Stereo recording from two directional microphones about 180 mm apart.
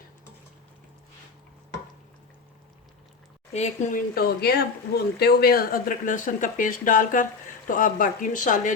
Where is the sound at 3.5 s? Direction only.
40° left (ahead or behind).